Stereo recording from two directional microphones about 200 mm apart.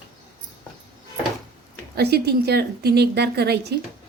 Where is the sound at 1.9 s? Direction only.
55° right (ahead or behind).